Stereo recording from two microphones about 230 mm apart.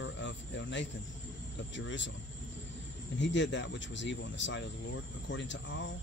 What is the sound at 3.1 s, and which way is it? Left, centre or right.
Speech, left.